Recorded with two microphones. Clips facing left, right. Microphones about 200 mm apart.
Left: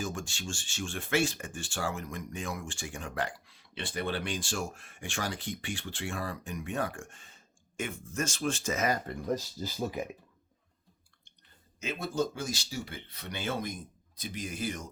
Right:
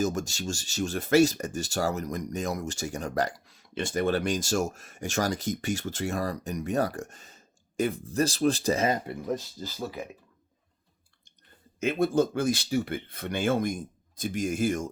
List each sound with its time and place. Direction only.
0.0 s speech: 40° right (ahead or behind)
9.0 s speech: centre (ahead or behind)
9.6 s speech: 15° left (ahead or behind)
11.8 s speech: 55° right (ahead or behind)